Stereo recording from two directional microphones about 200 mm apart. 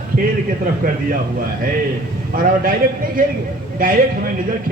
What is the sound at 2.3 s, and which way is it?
Speech, 45° right (ahead or behind).